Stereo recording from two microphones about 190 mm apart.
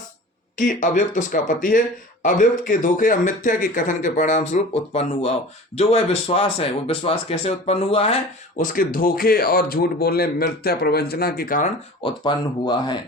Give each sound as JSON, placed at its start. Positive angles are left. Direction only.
{"t": 0.5, "sound": "speech", "side_deg": 45}
{"t": 8.5, "sound": "speech", "side_deg": 45}
{"t": 12.0, "sound": "speech", "side_deg": 25}